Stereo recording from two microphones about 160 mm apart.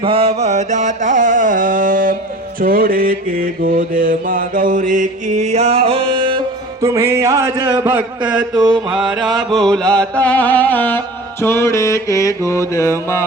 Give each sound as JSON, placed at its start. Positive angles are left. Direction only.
{"t": 0.0, "sound": "music", "side_deg": -35}
{"t": 2.6, "sound": "mantra", "side_deg": -65}
{"t": 6.8, "sound": "speech", "side_deg": -15}
{"t": 8.5, "sound": "mantra", "side_deg": -30}
{"t": 9.0, "sound": "chant", "side_deg": 0}